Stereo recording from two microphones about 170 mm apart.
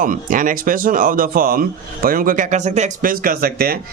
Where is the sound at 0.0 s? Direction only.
50° right (ahead or behind).